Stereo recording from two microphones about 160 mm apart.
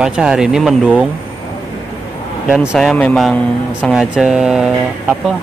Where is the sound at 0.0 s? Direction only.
5° right (ahead or behind).